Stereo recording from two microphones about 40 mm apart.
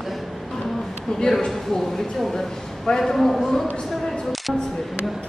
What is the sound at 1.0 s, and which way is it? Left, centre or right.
A man's voice, centre.